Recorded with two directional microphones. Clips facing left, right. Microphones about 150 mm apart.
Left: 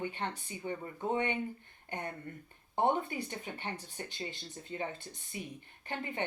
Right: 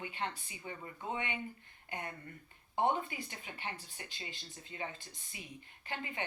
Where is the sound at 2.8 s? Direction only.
40° left (ahead or behind).